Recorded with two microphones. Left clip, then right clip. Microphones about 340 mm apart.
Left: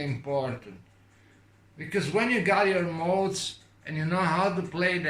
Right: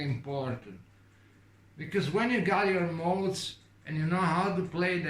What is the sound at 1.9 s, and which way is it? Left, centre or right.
Speech, centre.